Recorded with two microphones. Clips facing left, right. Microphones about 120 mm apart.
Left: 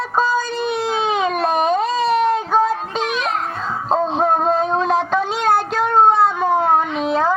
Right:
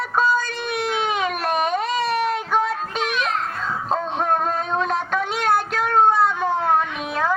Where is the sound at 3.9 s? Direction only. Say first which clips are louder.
Left 5 dB; 20° left (ahead or behind).